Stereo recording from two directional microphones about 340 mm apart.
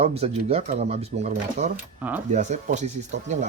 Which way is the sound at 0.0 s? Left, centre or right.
Centre.